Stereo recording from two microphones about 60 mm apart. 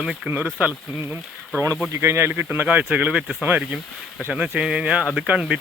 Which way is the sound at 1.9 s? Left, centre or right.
Right.